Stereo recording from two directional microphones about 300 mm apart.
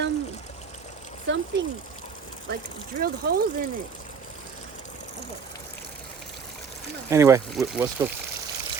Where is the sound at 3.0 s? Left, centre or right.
Right.